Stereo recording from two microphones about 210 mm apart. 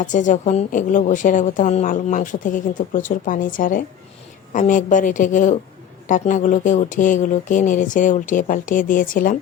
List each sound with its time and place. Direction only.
0.0 s a woman's voice: 35° left (ahead or behind)